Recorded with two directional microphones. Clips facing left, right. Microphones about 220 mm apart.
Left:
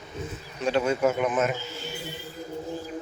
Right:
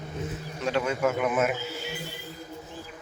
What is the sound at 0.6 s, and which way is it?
Speech, 30° left (ahead or behind).